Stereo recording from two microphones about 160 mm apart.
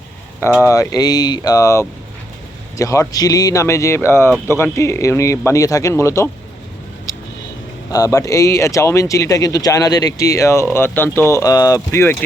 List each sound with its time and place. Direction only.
0.6 s speech: 20° left (ahead or behind)
7.9 s speech: 20° left (ahead or behind)